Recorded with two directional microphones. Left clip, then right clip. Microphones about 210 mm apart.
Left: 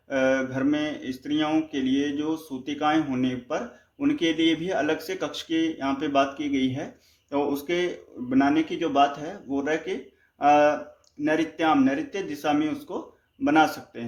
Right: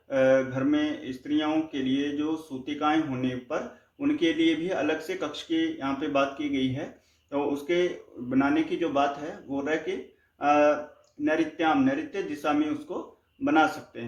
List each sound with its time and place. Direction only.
0.1 s speech: 45° left (ahead or behind)